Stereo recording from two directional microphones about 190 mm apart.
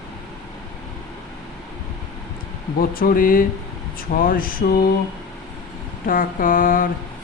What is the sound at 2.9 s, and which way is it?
Mantra, 50° left (ahead or behind).